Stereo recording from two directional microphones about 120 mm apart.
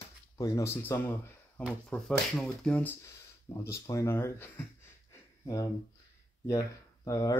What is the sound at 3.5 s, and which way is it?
Speech, 25° left (ahead or behind).